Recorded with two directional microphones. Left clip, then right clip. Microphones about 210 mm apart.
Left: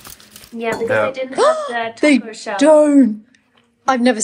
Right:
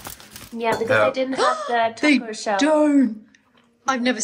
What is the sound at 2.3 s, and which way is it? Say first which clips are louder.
Speech: right 1 dB; 55° right (ahead or behind).